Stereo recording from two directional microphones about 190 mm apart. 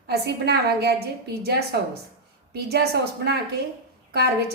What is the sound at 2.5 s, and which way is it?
A woman's voice, 60° right (ahead or behind).